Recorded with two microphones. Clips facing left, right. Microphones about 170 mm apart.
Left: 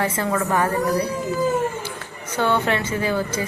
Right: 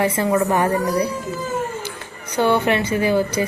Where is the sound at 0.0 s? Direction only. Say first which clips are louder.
Right 4 dB; 15° right (ahead or behind).